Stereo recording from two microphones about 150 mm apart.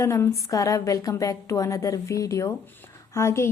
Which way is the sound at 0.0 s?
20° left (ahead or behind).